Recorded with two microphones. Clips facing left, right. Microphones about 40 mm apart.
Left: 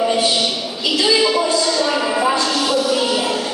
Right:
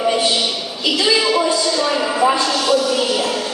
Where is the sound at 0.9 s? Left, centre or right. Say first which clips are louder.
Left 1 dB; centre.